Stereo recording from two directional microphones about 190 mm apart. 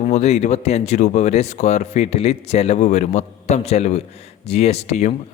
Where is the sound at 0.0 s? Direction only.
35° left (ahead or behind).